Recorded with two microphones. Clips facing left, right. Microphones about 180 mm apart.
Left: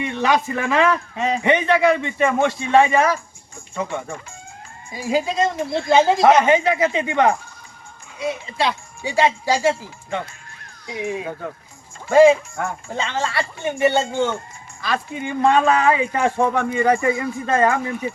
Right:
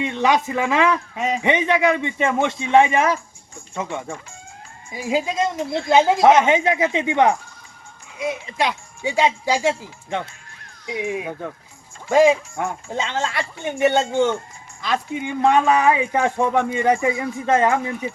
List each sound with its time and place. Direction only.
0.0 s speech: 20° right (ahead or behind)
4.9 s speech: 15° right (ahead or behind)